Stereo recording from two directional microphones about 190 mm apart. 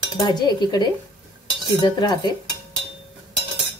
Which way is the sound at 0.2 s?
20° left (ahead or behind).